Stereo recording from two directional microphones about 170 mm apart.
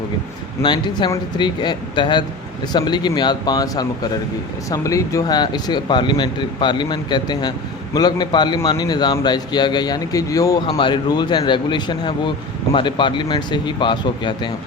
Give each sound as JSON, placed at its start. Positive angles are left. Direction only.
{"t": 0.6, "sound": "speech", "side_deg": 25}